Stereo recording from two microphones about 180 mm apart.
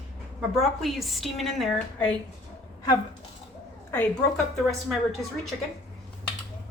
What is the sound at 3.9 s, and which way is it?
Speech, 5° left (ahead or behind).